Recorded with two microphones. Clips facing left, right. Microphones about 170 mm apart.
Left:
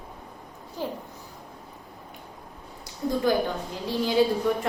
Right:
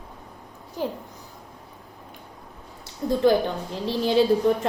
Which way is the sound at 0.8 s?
15° right (ahead or behind).